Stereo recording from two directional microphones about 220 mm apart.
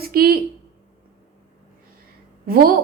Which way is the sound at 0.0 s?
45° right (ahead or behind).